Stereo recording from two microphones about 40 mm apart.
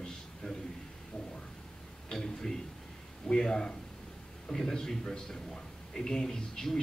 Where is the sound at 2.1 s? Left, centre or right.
Centre.